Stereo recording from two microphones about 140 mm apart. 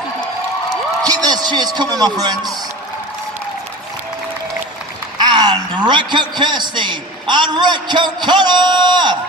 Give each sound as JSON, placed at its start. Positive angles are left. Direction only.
{"t": 1.0, "sound": "a man's voice", "side_deg": -25}
{"t": 5.2, "sound": "a man's voice", "side_deg": -30}